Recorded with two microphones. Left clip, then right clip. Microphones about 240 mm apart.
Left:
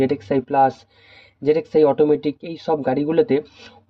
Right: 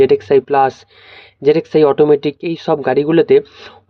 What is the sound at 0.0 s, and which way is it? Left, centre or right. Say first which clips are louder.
Speech: right 10 dB; right.